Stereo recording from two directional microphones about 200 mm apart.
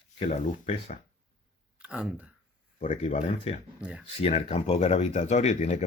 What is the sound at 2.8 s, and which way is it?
Speech, 30° left (ahead or behind).